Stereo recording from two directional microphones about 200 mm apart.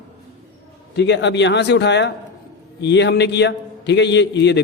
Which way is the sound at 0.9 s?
60° left (ahead or behind).